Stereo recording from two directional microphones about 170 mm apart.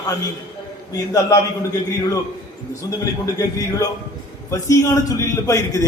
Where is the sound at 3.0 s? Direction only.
20° left (ahead or behind).